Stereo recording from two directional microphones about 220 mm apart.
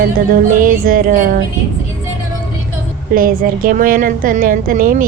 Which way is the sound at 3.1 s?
40° right (ahead or behind).